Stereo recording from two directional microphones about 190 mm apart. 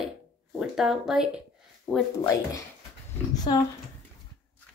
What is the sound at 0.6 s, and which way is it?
Speech, centre (ahead or behind).